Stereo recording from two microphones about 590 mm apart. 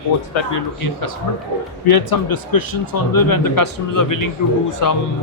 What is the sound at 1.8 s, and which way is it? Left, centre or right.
A man's voice, left.